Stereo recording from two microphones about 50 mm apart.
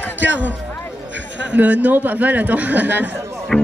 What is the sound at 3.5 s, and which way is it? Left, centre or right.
Speech, centre.